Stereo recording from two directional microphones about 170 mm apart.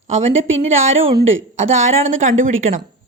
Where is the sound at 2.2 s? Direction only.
50° right (ahead or behind).